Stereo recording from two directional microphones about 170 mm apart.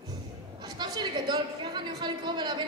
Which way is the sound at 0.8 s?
25° right (ahead or behind).